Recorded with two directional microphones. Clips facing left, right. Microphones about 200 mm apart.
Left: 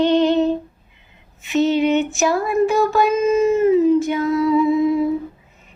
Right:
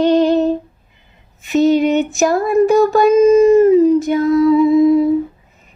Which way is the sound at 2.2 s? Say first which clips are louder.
Right 7 dB; 45° right (ahead or behind).